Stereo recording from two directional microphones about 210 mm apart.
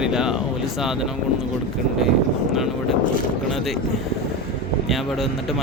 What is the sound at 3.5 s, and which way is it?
Speech, centre (ahead or behind).